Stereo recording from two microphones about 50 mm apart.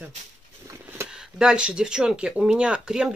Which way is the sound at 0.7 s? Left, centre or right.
Right.